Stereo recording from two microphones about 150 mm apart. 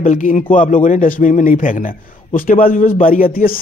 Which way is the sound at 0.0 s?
55° left (ahead or behind).